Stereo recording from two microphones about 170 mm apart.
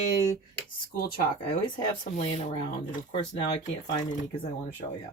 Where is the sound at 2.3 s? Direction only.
35° left (ahead or behind).